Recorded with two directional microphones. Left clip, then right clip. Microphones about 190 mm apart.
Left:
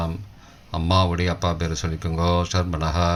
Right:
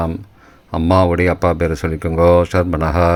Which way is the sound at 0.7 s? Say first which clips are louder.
Right 8 dB; 35° right (ahead or behind).